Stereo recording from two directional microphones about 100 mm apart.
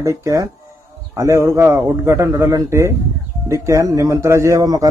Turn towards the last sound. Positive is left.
turn(degrees=-35)  # may be behind; listen again after turning